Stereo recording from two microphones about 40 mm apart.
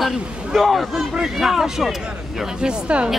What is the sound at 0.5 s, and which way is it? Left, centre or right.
Speech, centre.